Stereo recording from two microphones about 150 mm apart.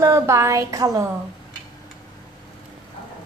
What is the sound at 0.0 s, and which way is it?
A woman's voice, 20° right (ahead or behind).